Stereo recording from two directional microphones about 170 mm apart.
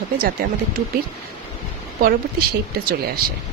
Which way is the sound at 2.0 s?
65° right (ahead or behind).